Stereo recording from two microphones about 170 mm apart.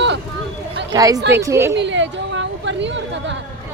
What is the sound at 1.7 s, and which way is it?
Speech, 90° right.